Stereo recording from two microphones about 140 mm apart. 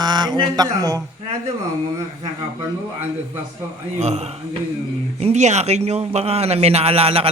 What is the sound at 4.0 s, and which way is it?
A man's voice, 50° right (ahead or behind).